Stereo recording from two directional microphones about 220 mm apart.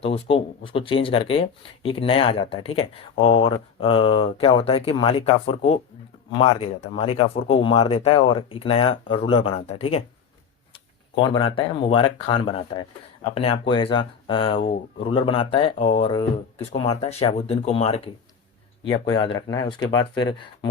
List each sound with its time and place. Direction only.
0.0 s speech: 25° left (ahead or behind)
11.1 s speech: 20° left (ahead or behind)